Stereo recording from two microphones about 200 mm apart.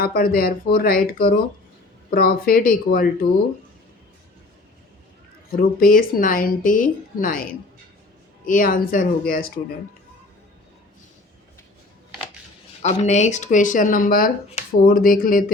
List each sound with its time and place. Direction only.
0.0 s speech: 45° left (ahead or behind)
5.5 s speech: 45° left (ahead or behind)
8.4 s speech: 45° left (ahead or behind)
12.9 s speech: 35° left (ahead or behind)